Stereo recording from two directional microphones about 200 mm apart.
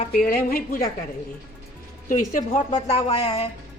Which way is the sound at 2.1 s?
40° left (ahead or behind).